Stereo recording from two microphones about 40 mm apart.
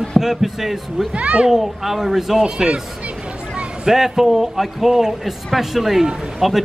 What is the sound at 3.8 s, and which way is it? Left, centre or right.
A man's voice, centre.